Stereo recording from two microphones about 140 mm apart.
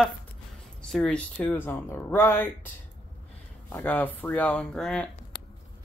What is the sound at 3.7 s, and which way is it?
Speech, 15° left (ahead or behind).